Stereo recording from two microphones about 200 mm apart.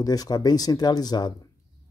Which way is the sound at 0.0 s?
20° left (ahead or behind).